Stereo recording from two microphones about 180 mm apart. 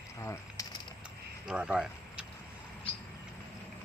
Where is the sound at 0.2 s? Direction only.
15° left (ahead or behind).